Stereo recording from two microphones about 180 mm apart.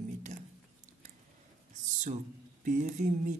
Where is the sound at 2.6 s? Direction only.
45° right (ahead or behind).